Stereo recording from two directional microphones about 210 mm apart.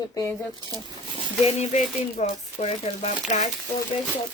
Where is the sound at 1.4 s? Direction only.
35° left (ahead or behind).